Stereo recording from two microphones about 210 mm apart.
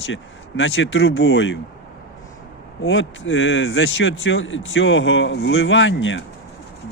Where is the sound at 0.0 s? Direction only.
65° left (ahead or behind).